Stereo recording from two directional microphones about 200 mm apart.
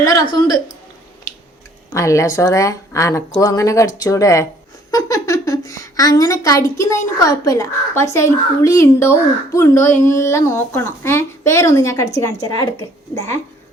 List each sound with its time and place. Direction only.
0.0 s a woman's voice: 20° left (ahead or behind)
1.9 s a woman's voice: 15° left (ahead or behind)